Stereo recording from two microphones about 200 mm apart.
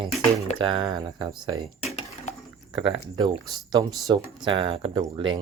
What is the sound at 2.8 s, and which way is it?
Speech, 25° right (ahead or behind).